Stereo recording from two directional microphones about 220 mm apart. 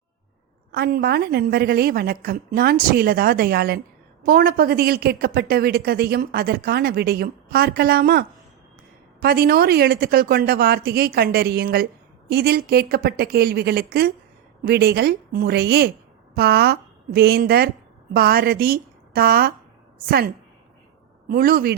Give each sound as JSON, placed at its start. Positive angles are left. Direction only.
{"t": 0.7, "sound": "a woman's voice", "side_deg": -45}
{"t": 9.2, "sound": "a woman's voice", "side_deg": -45}